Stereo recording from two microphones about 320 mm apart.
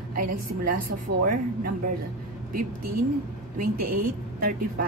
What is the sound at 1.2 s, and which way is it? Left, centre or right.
Speech, right.